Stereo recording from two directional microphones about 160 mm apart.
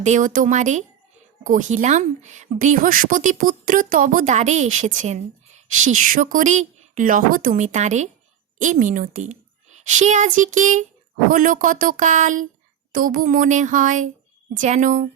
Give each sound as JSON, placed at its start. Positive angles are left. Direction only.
{"t": 0.0, "sound": "speech", "side_deg": -50}